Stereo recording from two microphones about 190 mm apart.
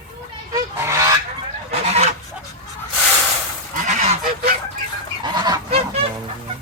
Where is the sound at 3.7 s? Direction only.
45° right (ahead or behind).